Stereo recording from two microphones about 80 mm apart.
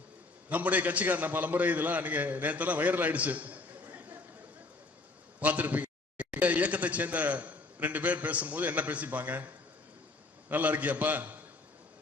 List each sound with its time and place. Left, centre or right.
0.5 s a man's voice: centre
5.4 s a man's voice: centre
10.5 s a man's voice: right